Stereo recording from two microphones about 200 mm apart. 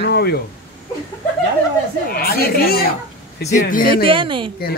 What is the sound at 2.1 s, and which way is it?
Speech, 50° left (ahead or behind).